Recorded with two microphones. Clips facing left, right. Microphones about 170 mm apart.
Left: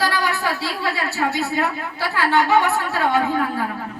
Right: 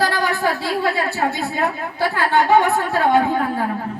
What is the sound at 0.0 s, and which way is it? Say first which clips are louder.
A woman's voice: right 3 dB; 50° right (ahead or behind).